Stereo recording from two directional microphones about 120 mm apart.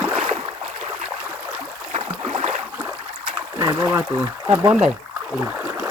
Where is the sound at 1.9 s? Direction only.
65° right (ahead or behind).